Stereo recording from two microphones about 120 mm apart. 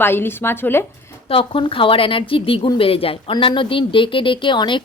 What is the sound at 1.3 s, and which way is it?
A woman's voice, 45° left (ahead or behind).